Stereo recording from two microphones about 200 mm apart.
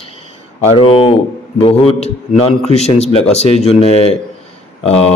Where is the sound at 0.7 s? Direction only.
25° left (ahead or behind).